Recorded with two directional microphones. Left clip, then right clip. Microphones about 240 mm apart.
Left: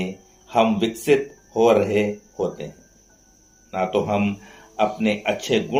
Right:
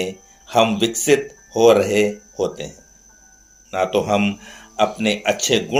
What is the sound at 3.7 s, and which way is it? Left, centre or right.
Speech, right.